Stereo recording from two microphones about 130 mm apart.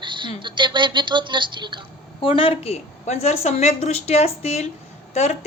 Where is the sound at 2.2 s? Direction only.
45° left (ahead or behind).